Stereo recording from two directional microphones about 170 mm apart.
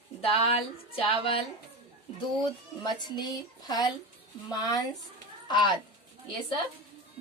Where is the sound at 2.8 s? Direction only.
25° left (ahead or behind).